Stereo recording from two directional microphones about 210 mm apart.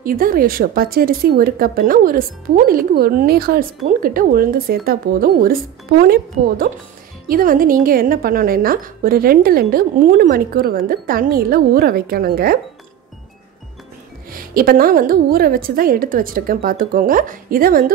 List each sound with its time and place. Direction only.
0.0 s a woman's voice: 45° right (ahead or behind)
14.3 s a woman's voice: 45° right (ahead or behind)